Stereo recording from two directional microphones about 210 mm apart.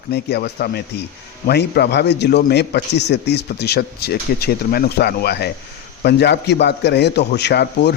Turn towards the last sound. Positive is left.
turn(degrees=55)  # may be behind; listen again after turning